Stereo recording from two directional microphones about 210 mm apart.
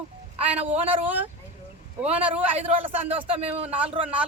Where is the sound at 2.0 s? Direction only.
5° right (ahead or behind).